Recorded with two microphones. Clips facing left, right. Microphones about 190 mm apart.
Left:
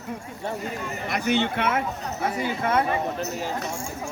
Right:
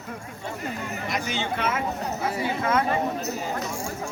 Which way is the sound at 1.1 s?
60° left (ahead or behind).